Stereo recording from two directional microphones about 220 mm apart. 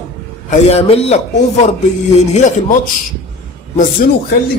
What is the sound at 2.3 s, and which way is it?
Speech, 35° left (ahead or behind).